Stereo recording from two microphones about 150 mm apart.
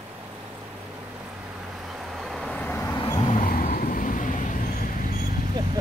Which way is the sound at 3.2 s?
60° left (ahead or behind).